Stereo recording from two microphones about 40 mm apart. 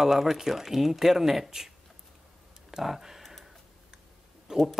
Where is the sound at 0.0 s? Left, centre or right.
Centre.